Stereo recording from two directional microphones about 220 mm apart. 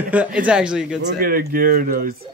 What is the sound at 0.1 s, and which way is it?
Speech, 5° right (ahead or behind).